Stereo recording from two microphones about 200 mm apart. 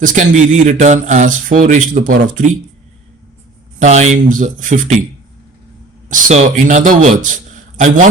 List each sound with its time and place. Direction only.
0.0 s speech: 40° right (ahead or behind)
3.8 s speech: 35° right (ahead or behind)
6.1 s speech: 40° right (ahead or behind)